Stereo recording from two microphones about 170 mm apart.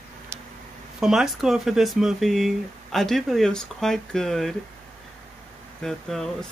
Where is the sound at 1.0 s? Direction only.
5° right (ahead or behind).